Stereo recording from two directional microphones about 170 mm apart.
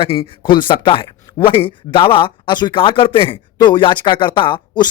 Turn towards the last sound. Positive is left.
turn(degrees=30)  # may be behind; listen again after turning